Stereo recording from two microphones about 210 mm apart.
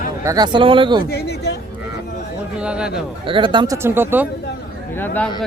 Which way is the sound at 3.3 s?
25° right (ahead or behind).